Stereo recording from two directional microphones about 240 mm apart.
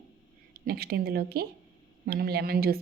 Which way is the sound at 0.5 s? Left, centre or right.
Right.